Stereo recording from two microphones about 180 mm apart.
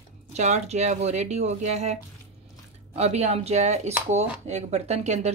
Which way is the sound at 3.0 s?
35° right (ahead or behind).